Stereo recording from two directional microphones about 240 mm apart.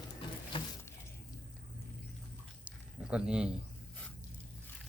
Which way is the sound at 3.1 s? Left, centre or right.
Centre.